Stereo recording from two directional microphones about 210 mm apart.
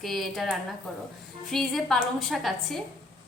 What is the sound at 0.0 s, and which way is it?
A woman's voice, centre (ahead or behind).